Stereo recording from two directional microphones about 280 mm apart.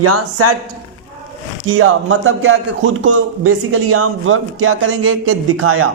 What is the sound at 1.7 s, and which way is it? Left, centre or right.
Speech, right.